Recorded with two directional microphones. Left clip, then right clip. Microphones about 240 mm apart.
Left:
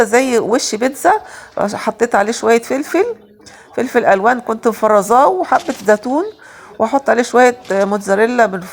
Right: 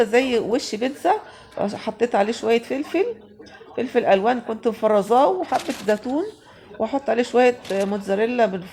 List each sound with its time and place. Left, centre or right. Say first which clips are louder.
0.0 s speech: left 6 dB; centre